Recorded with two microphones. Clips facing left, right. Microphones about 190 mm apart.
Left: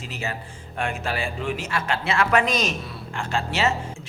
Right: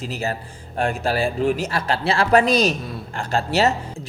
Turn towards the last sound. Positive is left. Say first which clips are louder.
# right 5 dB
turn(degrees=-40)  # may be behind; listen again after turning